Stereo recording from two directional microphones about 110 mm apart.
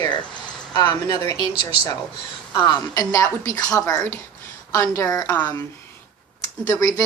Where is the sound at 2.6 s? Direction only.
40° left (ahead or behind).